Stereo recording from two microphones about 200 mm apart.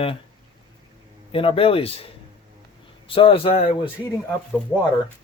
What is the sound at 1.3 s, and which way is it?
Speech, 25° left (ahead or behind).